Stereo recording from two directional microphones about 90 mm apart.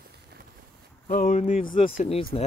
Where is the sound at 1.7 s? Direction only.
80° left.